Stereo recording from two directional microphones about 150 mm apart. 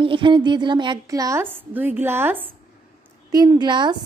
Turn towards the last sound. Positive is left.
turn(degrees=-30)  # may be behind; listen again after turning